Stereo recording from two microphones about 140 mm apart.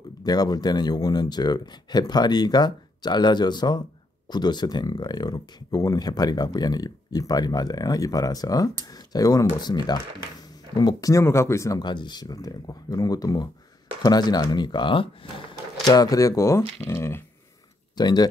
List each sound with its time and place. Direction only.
0.2 s speech: 30° left (ahead or behind)
17.9 s speech: 30° left (ahead or behind)